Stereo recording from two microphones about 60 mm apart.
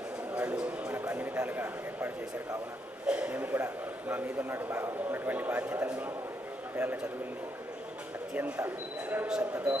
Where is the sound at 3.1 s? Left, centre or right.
Centre.